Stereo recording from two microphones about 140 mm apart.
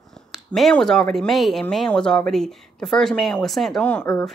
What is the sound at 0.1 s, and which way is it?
A woman's voice, centre (ahead or behind).